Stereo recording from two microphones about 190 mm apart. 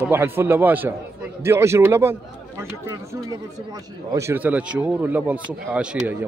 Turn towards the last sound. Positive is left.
turn(degrees=-5)  # may be behind; listen again after turning